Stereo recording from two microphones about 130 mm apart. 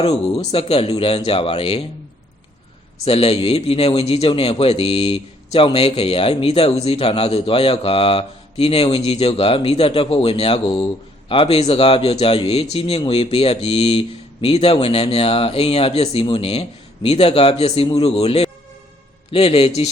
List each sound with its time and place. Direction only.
0.0 s a man's voice: 50° left (ahead or behind)
3.0 s a man's voice: 50° left (ahead or behind)